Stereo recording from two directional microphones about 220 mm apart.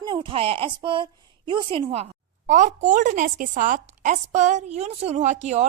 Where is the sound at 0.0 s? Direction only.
20° right (ahead or behind).